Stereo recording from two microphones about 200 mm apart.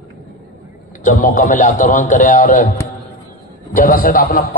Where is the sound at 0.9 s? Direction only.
40° left (ahead or behind).